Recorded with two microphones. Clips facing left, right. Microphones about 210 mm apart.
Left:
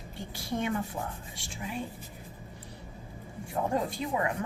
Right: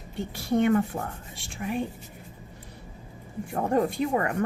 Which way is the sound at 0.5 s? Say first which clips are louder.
Right 9 dB; 60° right (ahead or behind).